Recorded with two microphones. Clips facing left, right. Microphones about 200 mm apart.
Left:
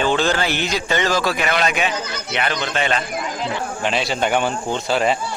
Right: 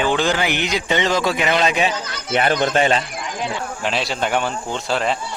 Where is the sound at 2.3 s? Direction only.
45° right (ahead or behind).